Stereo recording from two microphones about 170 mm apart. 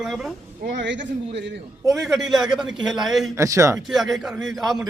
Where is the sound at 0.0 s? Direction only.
5° right (ahead or behind).